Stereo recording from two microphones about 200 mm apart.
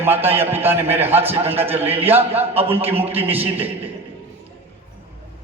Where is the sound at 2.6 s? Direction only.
10° right (ahead or behind).